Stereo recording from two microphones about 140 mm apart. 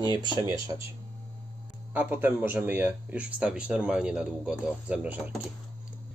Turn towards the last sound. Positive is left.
turn(degrees=-10)  # may be behind; listen again after turning